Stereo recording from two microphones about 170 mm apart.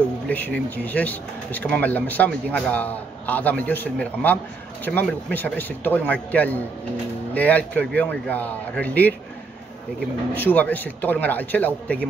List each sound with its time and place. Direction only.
0.3 s speech: 10° left (ahead or behind)
10.3 s speech: 10° left (ahead or behind)